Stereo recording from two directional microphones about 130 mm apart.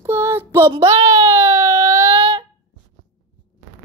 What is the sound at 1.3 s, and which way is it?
Baby cry, 20° right (ahead or behind).